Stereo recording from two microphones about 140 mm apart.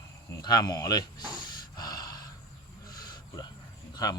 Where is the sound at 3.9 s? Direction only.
30° left (ahead or behind).